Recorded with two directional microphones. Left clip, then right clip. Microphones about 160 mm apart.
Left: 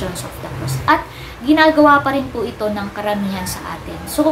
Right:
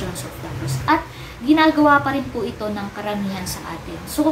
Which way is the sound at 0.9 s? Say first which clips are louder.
Left 4 dB; 25° left (ahead or behind).